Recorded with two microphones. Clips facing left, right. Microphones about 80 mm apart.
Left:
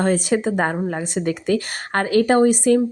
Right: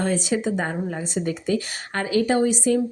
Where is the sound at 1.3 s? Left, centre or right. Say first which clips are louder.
Left 4 dB; left.